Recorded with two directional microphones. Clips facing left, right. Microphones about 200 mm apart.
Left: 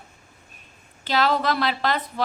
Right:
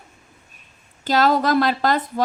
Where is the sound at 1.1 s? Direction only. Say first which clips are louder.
Right 4 dB; 45° right (ahead or behind).